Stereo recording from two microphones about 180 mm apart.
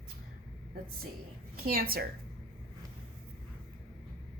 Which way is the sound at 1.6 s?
55° right (ahead or behind).